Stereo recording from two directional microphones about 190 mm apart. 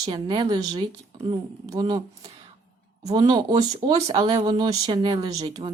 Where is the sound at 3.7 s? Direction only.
30° right (ahead or behind).